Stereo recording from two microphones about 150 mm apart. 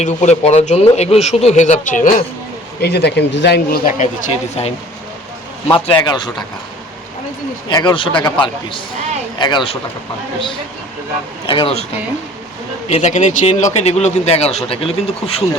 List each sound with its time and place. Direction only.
0.0 s speech: 50° left (ahead or behind)
2.8 s speech: 90° left; by 4.1 s 65° left (ahead or behind)
5.7 s speech: 30° left (ahead or behind)
7.7 s a man's voice: 30° left (ahead or behind)
11.4 s a man's voice: 35° left (ahead or behind)
12.9 s speech: 50° left (ahead or behind)